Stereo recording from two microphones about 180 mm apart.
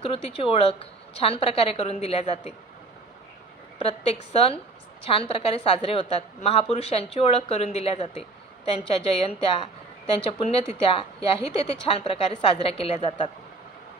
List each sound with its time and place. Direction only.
0.0 s a woman's voice: 30° left (ahead or behind)
3.8 s a woman's voice: 35° left (ahead or behind)